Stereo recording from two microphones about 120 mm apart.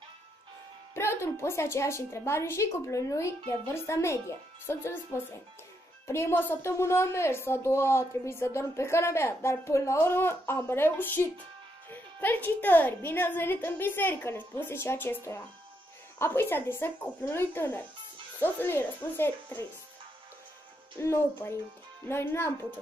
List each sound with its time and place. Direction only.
0.9 s a woman's voice: 20° left (ahead or behind)
21.0 s a woman's voice: 20° left (ahead or behind)